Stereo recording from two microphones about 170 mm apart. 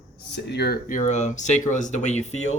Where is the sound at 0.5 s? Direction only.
70° left (ahead or behind); by 2.6 s 40° left (ahead or behind).